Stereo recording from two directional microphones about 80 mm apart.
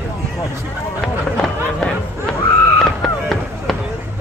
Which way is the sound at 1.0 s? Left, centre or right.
Centre.